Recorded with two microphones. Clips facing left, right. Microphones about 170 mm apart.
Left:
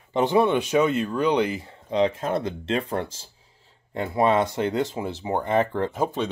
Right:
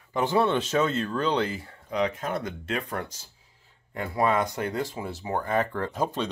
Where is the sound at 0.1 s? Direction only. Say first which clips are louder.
Left 4 dB; 15° left (ahead or behind).